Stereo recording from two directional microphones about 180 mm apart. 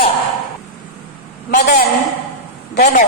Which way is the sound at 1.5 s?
60° left (ahead or behind).